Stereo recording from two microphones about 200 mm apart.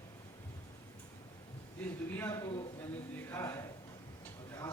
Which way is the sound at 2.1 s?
15° left (ahead or behind).